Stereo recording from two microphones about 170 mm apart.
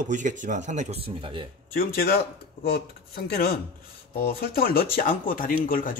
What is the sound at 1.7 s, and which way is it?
Speech, 60° left (ahead or behind).